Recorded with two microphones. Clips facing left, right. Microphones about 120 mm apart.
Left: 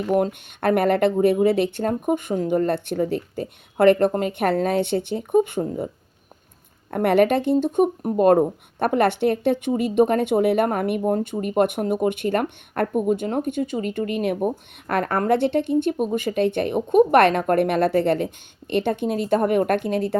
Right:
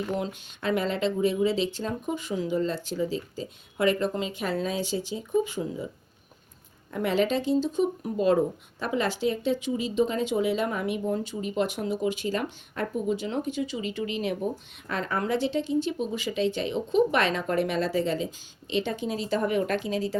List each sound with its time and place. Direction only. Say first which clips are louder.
0.1 s speech: left 10 dB; 55° left (ahead or behind)
6.9 s speech: left 7 dB; 60° left (ahead or behind)